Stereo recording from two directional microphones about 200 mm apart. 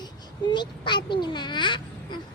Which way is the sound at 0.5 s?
20° left (ahead or behind).